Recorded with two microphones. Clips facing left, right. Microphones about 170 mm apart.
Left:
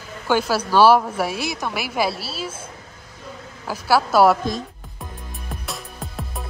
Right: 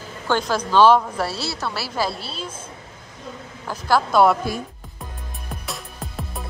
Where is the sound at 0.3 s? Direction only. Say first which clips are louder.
Left 1 dB; 10° left (ahead or behind).